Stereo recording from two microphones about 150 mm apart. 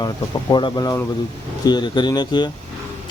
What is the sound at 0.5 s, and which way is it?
Speech, 30° left (ahead or behind).